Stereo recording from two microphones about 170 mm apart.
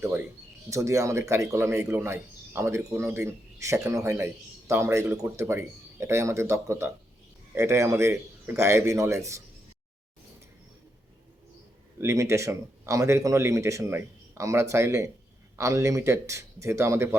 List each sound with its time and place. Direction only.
0.7 s speech: 20° right (ahead or behind)
11.9 s speech: 15° right (ahead or behind)